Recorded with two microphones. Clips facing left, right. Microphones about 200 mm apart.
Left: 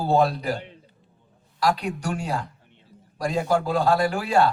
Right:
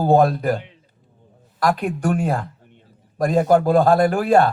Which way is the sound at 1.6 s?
55° right (ahead or behind).